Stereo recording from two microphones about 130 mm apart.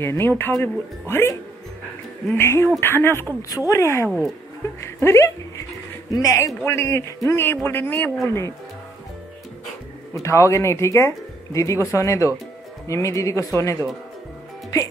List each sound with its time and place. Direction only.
0.0 s a man's voice: 20° left (ahead or behind)
10.1 s speech: 25° left (ahead or behind)